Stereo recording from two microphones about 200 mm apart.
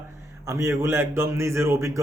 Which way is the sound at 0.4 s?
15° right (ahead or behind).